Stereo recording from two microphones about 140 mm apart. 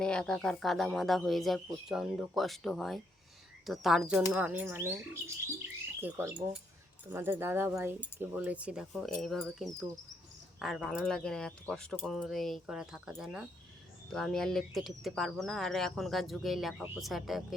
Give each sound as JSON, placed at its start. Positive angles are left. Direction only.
{"t": 0.0, "sound": "speech", "side_deg": 5}